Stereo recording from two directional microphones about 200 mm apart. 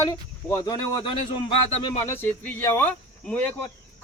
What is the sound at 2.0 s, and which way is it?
Speech, 10° left (ahead or behind).